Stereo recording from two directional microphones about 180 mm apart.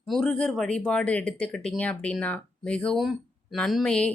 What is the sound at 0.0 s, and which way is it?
Speech, 5° left (ahead or behind).